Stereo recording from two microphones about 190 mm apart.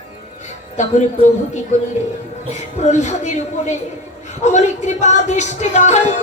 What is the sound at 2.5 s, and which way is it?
Speech, 35° left (ahead or behind).